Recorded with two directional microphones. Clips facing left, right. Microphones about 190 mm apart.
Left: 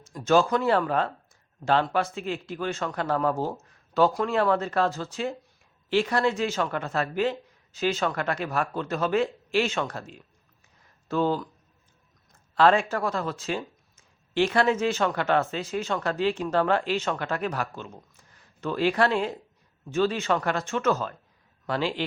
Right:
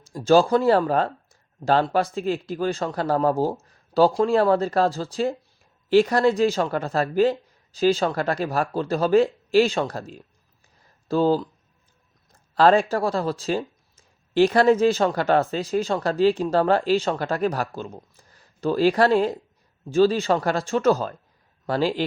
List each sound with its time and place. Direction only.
0.0 s speech: 30° right (ahead or behind)